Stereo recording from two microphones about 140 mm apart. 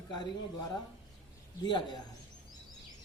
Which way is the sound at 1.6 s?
35° left (ahead or behind).